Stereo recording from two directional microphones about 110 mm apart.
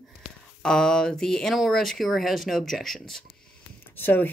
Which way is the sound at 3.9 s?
15° left (ahead or behind).